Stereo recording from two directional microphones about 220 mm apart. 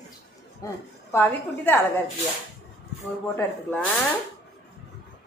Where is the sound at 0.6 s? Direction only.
15° left (ahead or behind).